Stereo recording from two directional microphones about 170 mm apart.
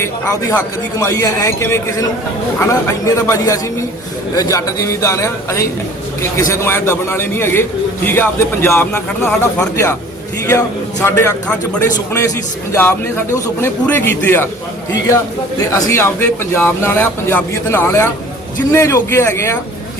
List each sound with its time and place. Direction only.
0.0 s speech: 15° left (ahead or behind)
11.0 s speech: 15° left (ahead or behind)
15.7 s speech: 15° left (ahead or behind)